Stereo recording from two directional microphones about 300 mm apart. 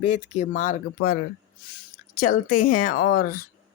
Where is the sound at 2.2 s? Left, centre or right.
Left.